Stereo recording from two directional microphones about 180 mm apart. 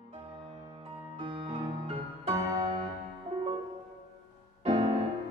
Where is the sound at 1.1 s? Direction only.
30° right (ahead or behind).